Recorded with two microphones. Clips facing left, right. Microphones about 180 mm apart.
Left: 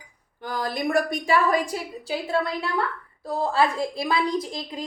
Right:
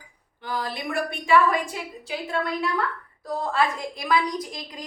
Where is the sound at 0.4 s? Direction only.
45° left (ahead or behind).